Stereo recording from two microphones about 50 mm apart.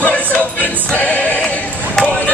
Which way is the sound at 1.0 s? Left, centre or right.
Left.